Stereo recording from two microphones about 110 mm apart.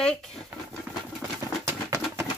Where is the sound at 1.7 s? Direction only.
25° right (ahead or behind).